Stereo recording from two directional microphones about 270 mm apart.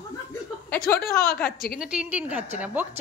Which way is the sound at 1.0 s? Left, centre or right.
Left.